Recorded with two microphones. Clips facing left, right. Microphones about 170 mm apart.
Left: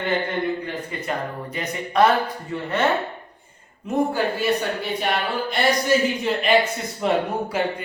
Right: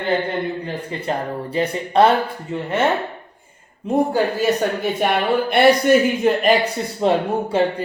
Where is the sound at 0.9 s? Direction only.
30° right (ahead or behind).